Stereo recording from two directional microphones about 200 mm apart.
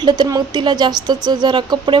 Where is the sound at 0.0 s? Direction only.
20° right (ahead or behind).